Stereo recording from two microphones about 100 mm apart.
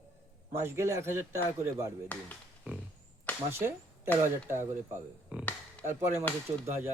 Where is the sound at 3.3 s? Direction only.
15° left (ahead or behind).